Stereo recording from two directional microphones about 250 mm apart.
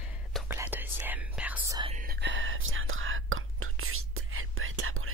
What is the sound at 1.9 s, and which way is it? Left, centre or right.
Whispering, right.